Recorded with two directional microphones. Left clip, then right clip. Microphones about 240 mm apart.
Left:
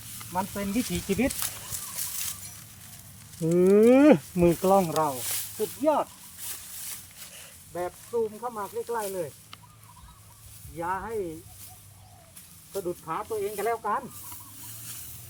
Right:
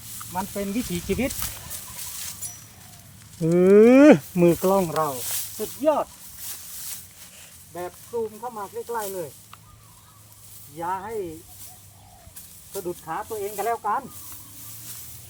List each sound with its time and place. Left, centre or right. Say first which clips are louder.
0.6 s speech: right 4 dB; centre
1.0 s speech: right 1 dB; right
3.4 s speech: right 5 dB; right
4.8 s speech: right 2 dB; centre
5.5 s snake: right 3 dB; centre
7.7 s speech: left 1 dB; centre
10.8 s speech: right 2 dB; centre
12.7 s speech: right 1 dB; centre